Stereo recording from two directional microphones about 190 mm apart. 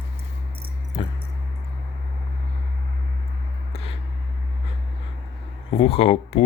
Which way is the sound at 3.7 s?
30° left (ahead or behind).